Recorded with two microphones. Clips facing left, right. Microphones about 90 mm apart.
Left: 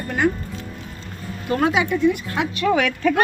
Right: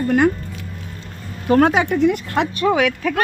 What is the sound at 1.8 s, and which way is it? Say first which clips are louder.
Speech: right 2 dB; 75° right (ahead or behind).